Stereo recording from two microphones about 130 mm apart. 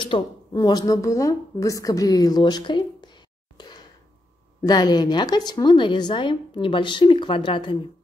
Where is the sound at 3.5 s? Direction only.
35° left (ahead or behind).